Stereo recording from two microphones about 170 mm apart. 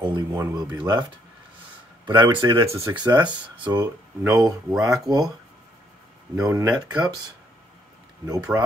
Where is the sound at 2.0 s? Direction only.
30° right (ahead or behind).